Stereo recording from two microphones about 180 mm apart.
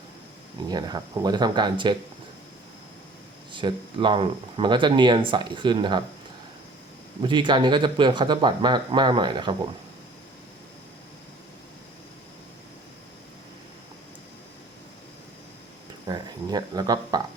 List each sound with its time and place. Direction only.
0.7 s speech: 20° right (ahead or behind)
3.5 s speech: 25° right (ahead or behind)
7.2 s speech: 25° right (ahead or behind)
16.0 s speech: 25° right (ahead or behind)